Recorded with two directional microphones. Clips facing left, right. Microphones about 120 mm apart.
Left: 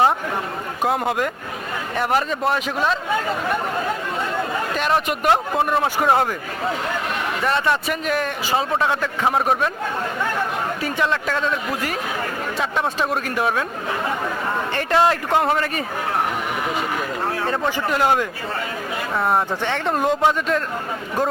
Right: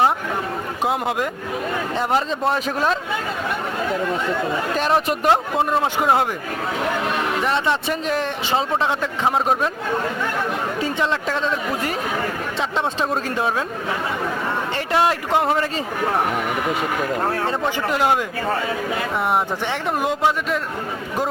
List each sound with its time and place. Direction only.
0.9 s speech: 15° right (ahead or behind)
2.5 s speech: 35° right (ahead or behind)
4.7 s speech: 35° right (ahead or behind)
7.4 s a man's voice: 20° right (ahead or behind)
10.8 s a man's voice: 25° right (ahead or behind)
14.8 s a man's voice: 15° right (ahead or behind)
17.4 s a man's voice: 20° right (ahead or behind)
19.3 s speech: 15° right (ahead or behind)